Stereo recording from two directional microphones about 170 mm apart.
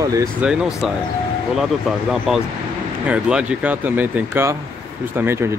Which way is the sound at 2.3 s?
5° right (ahead or behind).